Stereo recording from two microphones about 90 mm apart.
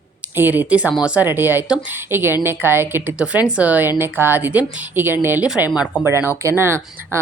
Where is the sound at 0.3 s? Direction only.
20° right (ahead or behind).